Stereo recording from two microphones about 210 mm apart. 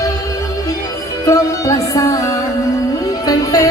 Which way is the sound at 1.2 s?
15° left (ahead or behind).